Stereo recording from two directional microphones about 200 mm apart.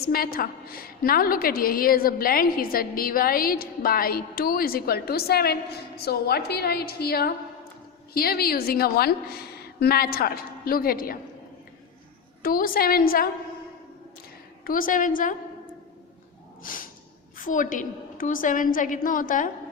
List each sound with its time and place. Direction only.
0.0 s a woman's voice: 50° left (ahead or behind)
12.4 s a woman's voice: 45° left (ahead or behind)
14.6 s a woman's voice: 45° left (ahead or behind)
16.6 s snort: 45° left (ahead or behind)
17.3 s a woman's voice: 40° left (ahead or behind)